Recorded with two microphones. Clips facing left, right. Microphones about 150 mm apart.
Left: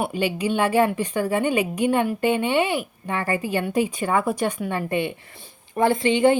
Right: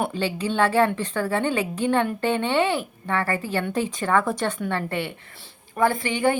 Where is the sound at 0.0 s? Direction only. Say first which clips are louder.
Left 2 dB; 15° left (ahead or behind).